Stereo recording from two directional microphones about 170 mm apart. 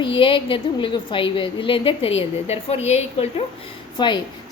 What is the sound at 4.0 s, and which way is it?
Speech, 25° left (ahead or behind).